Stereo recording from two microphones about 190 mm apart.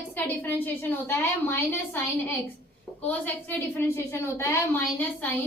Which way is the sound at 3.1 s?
10° left (ahead or behind).